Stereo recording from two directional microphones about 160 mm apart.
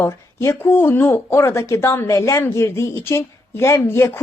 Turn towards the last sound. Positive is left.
turn(degrees=15)  # may be behind; listen again after turning